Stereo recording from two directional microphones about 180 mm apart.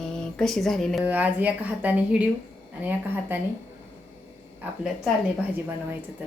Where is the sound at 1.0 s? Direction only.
10° right (ahead or behind).